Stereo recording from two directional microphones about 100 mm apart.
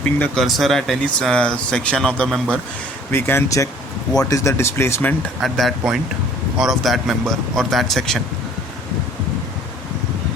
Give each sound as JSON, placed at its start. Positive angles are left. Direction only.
{"t": 0.3, "sound": "speech", "side_deg": 0}
{"t": 3.1, "sound": "speech", "side_deg": 25}
{"t": 5.4, "sound": "speech", "side_deg": 0}